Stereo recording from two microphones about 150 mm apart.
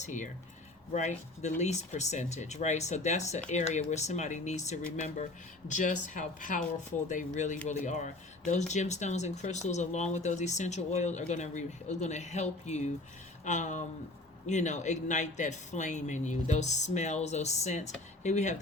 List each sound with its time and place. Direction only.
0.0 s speech: 55° left (ahead or behind)